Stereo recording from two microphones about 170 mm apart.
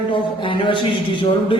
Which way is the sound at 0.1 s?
30° left (ahead or behind).